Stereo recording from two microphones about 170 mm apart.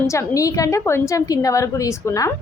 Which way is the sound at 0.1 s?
20° left (ahead or behind).